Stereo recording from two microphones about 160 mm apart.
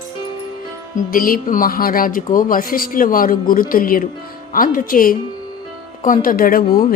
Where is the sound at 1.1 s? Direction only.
60° left (ahead or behind).